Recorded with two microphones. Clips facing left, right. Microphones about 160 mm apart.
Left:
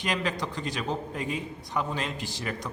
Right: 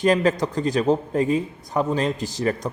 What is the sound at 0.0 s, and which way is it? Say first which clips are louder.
A man's voice: right 11 dB; 45° right (ahead or behind).